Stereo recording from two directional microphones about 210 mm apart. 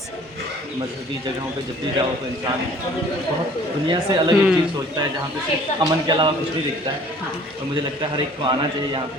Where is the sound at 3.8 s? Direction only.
20° right (ahead or behind).